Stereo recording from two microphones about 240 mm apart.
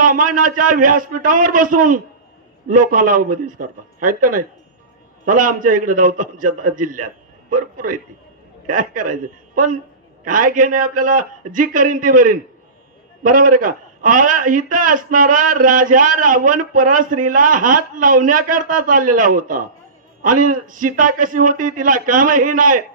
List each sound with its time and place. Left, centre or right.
0.0 s a man's voice: right